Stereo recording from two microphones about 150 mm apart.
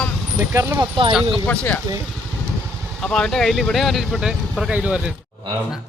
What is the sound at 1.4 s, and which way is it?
Speech, 10° left (ahead or behind).